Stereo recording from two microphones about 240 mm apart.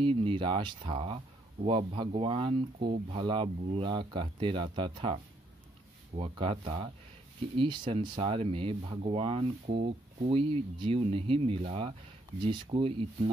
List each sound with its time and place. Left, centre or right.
0.0 s speech: right